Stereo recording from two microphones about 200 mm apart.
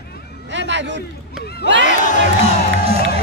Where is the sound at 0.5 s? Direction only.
65° right (ahead or behind).